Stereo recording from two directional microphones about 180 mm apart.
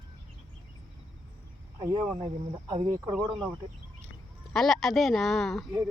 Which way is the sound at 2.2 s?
25° right (ahead or behind).